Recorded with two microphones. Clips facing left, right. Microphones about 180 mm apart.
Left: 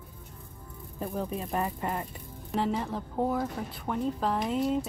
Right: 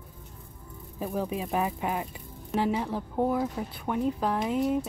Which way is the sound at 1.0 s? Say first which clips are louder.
Right 2 dB; 10° right (ahead or behind).